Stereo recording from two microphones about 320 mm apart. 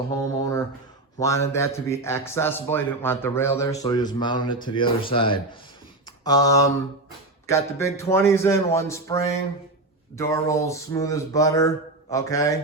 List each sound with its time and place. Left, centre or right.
0.1 s mantra: centre
1.2 s speech: centre